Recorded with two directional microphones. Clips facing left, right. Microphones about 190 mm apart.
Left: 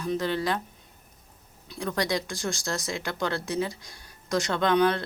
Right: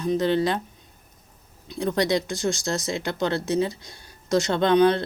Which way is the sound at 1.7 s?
25° right (ahead or behind).